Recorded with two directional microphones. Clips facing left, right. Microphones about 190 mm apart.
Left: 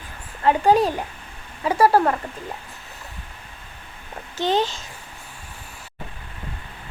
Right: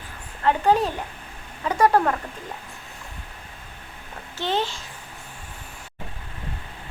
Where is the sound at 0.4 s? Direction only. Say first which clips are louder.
Left 3 dB; 10° left (ahead or behind).